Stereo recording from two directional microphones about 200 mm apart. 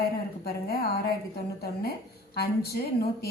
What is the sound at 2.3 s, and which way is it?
Speech, 50° left (ahead or behind).